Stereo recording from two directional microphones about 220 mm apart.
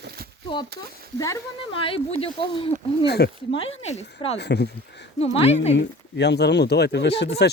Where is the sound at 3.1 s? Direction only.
50° left (ahead or behind).